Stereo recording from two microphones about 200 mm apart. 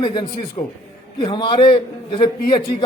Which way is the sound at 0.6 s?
35° left (ahead or behind).